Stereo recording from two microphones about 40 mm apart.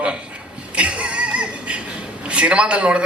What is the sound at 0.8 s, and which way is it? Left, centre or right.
Music, right.